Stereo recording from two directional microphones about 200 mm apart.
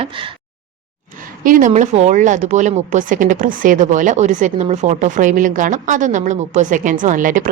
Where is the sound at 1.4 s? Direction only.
45° right (ahead or behind).